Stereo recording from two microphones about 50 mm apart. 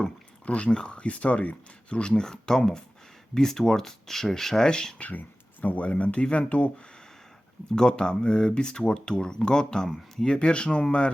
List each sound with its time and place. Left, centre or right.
0.4 s speech: left
4.9 s speech: left; by 6.5 s centre
7.8 s speech: centre